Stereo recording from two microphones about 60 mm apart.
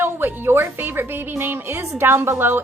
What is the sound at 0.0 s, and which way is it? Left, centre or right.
Speech, right.